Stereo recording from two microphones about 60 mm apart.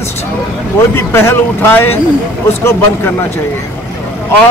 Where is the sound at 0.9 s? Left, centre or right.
Left.